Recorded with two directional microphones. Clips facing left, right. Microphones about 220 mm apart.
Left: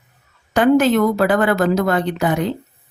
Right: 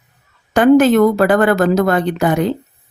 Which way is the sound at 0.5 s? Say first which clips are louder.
Right 4 dB; 50° right (ahead or behind).